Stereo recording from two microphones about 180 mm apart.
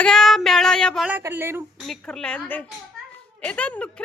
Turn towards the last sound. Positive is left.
turn(degrees=5)  # may be behind; listen again after turning